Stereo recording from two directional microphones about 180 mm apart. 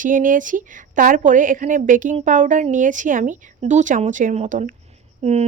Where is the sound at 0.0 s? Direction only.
50° right (ahead or behind).